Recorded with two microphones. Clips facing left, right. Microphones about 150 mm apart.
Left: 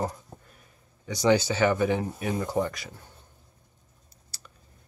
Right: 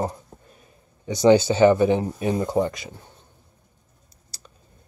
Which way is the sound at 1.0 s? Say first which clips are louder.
Right 7 dB; 25° right (ahead or behind).